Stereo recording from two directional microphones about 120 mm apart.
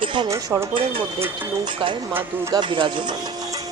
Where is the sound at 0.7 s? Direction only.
50° right (ahead or behind).